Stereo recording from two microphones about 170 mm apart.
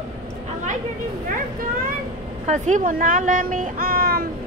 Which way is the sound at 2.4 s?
45° right (ahead or behind).